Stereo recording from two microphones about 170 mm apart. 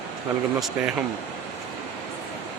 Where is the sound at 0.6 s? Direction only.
Centre (ahead or behind).